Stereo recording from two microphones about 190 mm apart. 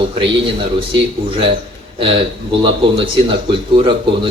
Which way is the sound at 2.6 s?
25° right (ahead or behind).